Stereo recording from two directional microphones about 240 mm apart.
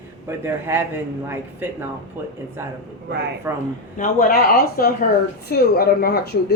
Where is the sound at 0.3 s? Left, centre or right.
Centre.